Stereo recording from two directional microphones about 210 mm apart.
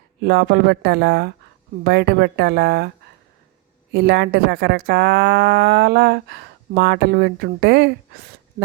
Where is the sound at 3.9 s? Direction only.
50° right (ahead or behind).